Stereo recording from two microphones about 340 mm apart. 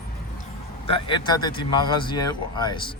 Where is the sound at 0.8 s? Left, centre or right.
Centre.